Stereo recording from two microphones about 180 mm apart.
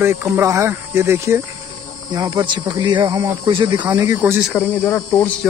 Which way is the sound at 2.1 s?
25° right (ahead or behind).